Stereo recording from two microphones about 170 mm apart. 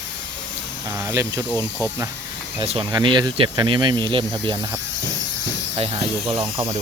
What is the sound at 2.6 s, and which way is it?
Speech, 30° right (ahead or behind).